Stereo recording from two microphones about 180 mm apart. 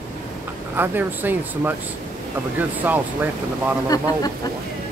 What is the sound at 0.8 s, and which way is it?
Speech, 10° right (ahead or behind).